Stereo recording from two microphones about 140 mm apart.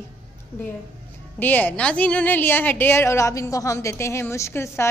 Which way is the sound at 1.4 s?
15° left (ahead or behind).